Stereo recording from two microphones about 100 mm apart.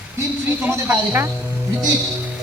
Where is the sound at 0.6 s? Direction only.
20° right (ahead or behind).